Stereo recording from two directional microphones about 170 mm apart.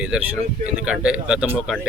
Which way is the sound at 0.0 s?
5° right (ahead or behind).